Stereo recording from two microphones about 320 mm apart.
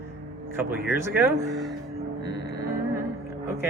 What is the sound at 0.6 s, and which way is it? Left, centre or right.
Speech, centre.